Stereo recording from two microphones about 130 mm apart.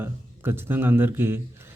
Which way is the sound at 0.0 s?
15° right (ahead or behind).